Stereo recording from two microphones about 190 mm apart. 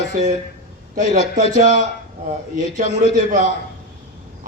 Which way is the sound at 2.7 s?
40° right (ahead or behind).